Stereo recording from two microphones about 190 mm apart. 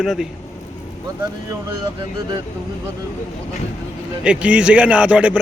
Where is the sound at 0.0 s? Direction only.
Centre (ahead or behind).